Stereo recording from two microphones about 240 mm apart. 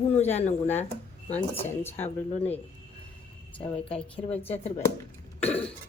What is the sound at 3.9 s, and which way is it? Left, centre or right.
Speech, left.